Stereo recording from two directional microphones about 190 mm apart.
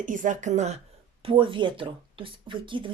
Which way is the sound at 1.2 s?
25° right (ahead or behind).